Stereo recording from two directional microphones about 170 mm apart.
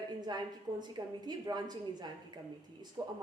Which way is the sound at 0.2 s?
25° right (ahead or behind).